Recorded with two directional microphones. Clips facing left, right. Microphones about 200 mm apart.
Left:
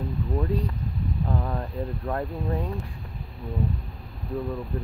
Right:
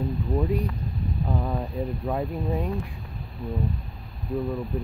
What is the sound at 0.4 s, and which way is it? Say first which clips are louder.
Speech: right 1 dB; 15° right (ahead or behind).